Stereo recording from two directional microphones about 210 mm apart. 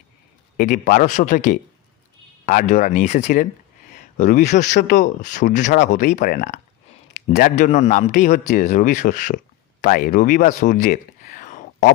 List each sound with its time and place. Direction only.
0.6 s a man's voice: 40° left (ahead or behind)